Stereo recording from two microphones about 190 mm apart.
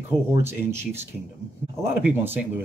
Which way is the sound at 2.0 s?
10° right (ahead or behind).